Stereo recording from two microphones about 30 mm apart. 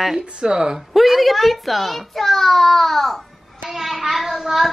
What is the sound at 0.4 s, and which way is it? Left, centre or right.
Speech, right.